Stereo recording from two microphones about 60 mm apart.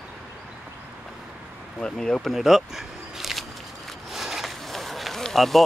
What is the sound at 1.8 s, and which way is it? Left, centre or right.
Speech, centre.